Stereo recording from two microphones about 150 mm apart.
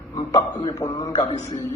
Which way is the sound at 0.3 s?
25° left (ahead or behind).